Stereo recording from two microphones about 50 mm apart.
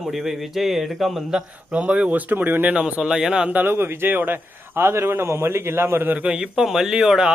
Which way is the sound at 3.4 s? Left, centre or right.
Right.